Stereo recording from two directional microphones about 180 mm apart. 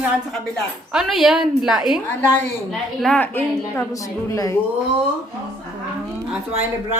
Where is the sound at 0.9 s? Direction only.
Centre (ahead or behind).